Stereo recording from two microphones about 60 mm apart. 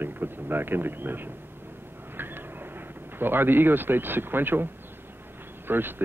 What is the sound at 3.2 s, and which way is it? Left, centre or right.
Speech, right.